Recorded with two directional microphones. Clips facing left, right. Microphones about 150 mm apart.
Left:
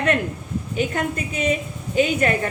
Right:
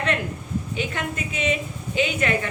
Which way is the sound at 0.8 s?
45° left (ahead or behind).